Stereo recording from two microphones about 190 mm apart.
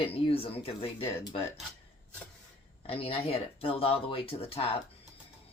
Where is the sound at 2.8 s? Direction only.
30° left (ahead or behind).